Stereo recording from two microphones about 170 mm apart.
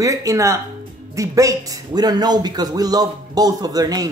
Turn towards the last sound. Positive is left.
turn(degrees=-20)  # may be behind; listen again after turning